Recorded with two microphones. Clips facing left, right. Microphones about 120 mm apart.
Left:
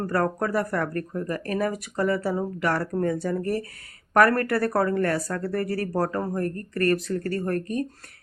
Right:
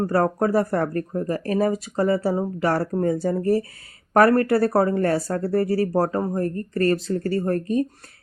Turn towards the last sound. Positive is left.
turn(degrees=-25)  # may be behind; listen again after turning